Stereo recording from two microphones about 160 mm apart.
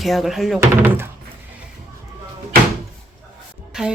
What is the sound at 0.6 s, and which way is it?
Speech, 15° right (ahead or behind).